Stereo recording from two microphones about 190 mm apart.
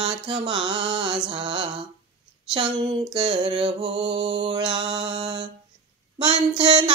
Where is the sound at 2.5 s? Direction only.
25° right (ahead or behind).